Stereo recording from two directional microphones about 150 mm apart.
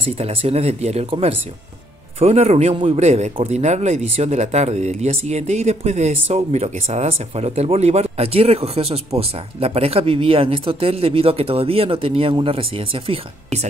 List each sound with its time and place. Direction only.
0.0 s speech: 40° right (ahead or behind)